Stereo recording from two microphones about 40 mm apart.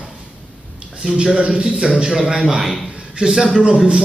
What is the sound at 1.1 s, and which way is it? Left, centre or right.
A man's voice, right.